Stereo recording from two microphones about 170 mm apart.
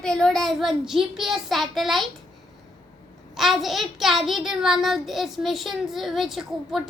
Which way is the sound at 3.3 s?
Centre (ahead or behind).